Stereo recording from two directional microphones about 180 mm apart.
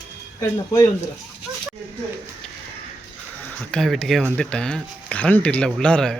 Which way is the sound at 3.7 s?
5° left (ahead or behind).